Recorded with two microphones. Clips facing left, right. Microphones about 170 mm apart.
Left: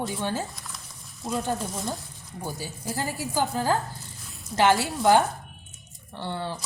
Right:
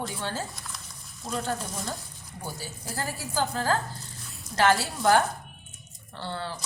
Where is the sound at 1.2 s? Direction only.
20° left (ahead or behind).